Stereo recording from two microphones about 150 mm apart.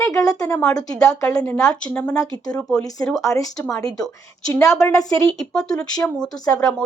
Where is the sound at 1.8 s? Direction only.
10° left (ahead or behind).